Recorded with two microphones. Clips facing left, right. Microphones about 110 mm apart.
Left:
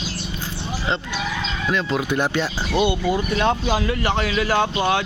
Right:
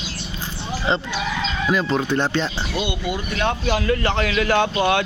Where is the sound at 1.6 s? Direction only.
5° right (ahead or behind).